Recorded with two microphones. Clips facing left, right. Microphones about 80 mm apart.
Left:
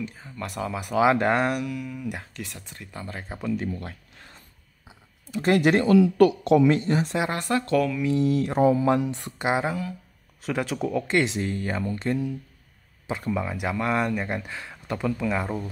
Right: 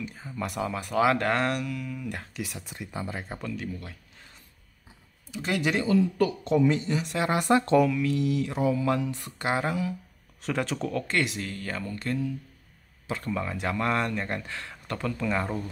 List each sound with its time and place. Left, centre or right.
0.1 s speech: centre
0.7 s speech: centre
2.3 s speech: centre
5.3 s speech: left
5.9 s speech: left
6.7 s speech: left
7.4 s speech: right
8.0 s speech: left
8.3 s mantra: left
8.8 s speech: left
10.4 s speech: centre